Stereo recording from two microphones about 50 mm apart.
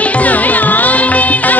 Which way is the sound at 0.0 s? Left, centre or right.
Left.